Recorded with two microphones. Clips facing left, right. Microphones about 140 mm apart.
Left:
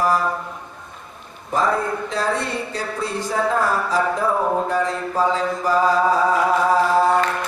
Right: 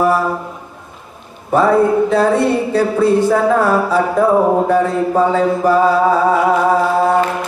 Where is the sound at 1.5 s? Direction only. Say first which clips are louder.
Right 9 dB; 65° right (ahead or behind).